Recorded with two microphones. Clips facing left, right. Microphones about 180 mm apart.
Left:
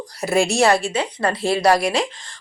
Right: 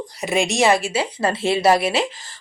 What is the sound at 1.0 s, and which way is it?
Speech, 30° right (ahead or behind).